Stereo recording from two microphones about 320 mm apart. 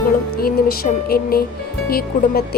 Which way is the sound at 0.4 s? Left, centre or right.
Left.